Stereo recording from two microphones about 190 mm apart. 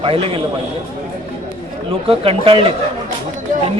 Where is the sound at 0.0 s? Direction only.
30° right (ahead or behind).